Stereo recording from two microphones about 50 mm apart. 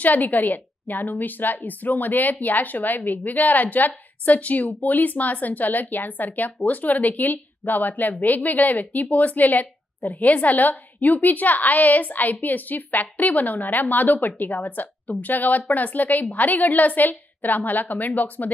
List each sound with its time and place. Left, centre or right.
0.0 s a woman's voice: left